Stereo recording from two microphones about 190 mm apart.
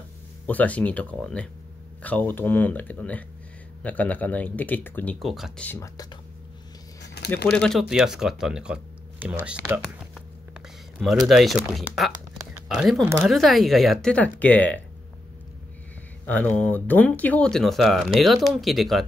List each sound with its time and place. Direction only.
0.5 s speech: 10° left (ahead or behind)
5.7 s speech: 15° left (ahead or behind)
7.2 s a sound: 60° left (ahead or behind)
7.5 s speech: centre (ahead or behind)
16.3 s speech: 10° left (ahead or behind)